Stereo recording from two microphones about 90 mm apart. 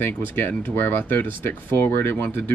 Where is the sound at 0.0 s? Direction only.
25° left (ahead or behind).